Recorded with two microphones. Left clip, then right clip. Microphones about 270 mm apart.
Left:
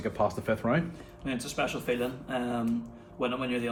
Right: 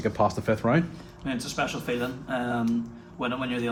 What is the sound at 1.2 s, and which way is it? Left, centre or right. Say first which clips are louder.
Speech: right 2 dB; centre.